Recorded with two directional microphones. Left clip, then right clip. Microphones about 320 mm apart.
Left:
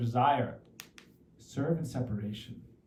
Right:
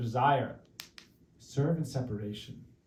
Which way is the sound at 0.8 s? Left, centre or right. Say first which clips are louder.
Right 3 dB; right.